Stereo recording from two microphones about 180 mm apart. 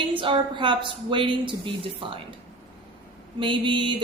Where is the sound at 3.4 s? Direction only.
25° right (ahead or behind).